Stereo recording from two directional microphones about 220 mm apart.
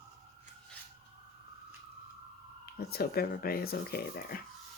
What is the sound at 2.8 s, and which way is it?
Speech, 45° left (ahead or behind).